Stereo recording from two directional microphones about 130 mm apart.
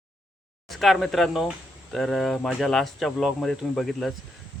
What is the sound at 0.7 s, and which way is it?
Speech, centre (ahead or behind).